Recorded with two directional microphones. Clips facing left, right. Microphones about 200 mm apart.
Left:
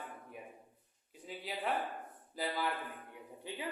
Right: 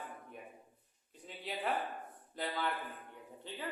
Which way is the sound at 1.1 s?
5° left (ahead or behind).